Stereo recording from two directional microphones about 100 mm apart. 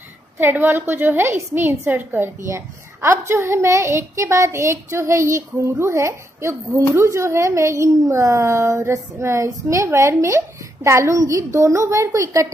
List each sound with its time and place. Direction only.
0.4 s a woman's voice: 20° right (ahead or behind)